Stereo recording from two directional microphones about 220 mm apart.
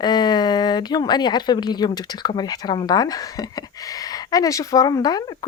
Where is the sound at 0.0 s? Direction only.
20° left (ahead or behind).